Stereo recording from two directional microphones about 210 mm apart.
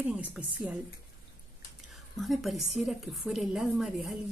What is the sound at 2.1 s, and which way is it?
Speech, centre (ahead or behind).